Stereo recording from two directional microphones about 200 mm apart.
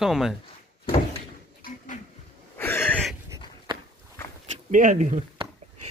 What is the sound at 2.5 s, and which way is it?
Wheeze, 10° left (ahead or behind).